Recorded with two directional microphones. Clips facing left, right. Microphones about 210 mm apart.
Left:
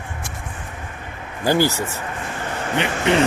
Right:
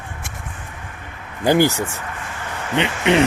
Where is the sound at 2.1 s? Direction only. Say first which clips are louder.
Left 3 dB; 40° left (ahead or behind).